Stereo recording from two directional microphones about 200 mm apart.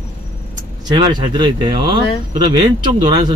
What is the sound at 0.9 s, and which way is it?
Speech, 20° right (ahead or behind).